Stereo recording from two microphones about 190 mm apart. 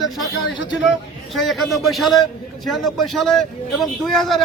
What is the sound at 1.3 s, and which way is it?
Speech, centre (ahead or behind).